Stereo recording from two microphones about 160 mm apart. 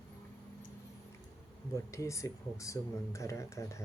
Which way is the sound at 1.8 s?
20° left (ahead or behind).